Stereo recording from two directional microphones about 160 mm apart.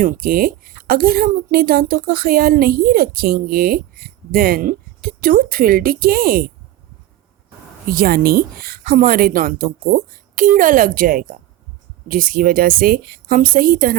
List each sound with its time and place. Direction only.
0.0 s a woman's voice: 65° right (ahead or behind)
7.9 s a woman's voice: 65° right (ahead or behind)